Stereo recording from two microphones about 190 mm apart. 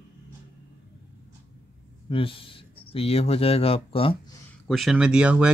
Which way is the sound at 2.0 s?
30° left (ahead or behind).